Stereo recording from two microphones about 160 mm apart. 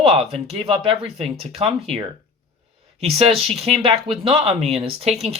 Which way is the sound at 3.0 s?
40° right (ahead or behind).